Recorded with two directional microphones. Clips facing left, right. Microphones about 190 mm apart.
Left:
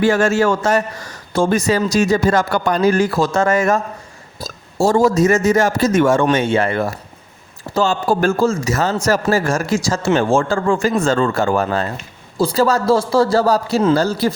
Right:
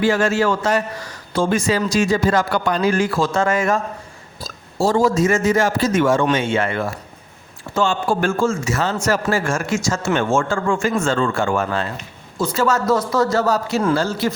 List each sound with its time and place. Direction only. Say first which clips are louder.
0.0 s a man's voice: left 3 dB; 50° left (ahead or behind)